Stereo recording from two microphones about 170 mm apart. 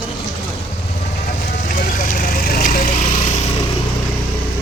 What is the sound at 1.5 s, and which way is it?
Vehicle, 55° left (ahead or behind).